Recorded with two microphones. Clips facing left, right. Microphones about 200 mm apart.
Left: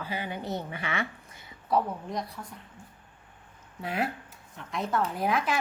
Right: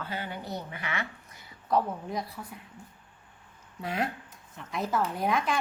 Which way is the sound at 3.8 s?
5° left (ahead or behind).